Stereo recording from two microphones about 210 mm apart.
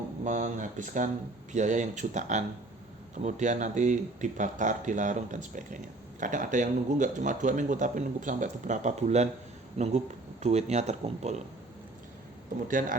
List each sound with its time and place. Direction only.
0.3 s speech: 35° right (ahead or behind)
12.6 s speech: 40° right (ahead or behind)